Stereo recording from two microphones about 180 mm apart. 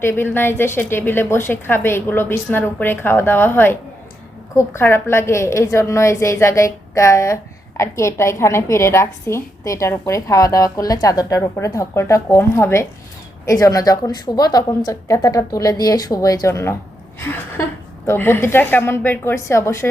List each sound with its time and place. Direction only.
0.0 s a woman's voice: 10° left (ahead or behind)
18.0 s a woman's voice: 15° left (ahead or behind)